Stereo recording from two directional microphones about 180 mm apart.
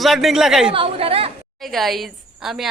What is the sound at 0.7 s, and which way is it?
Speech, 30° right (ahead or behind).